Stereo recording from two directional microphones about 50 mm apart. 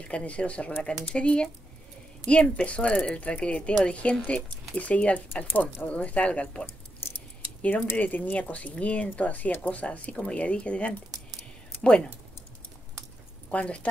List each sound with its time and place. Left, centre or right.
0.1 s speech: left
5.3 s speech: left
5.9 s speech: left
8.0 s speech: left
13.5 s speech: left